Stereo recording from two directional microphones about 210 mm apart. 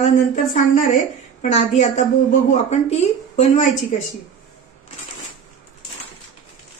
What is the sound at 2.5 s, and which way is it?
Speech, 30° left (ahead or behind).